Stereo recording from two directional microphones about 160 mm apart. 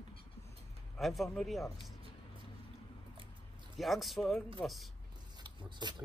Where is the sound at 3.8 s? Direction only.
Centre (ahead or behind).